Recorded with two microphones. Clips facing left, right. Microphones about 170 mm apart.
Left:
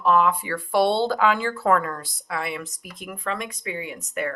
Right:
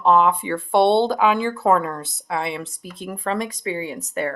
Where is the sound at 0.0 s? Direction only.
20° right (ahead or behind).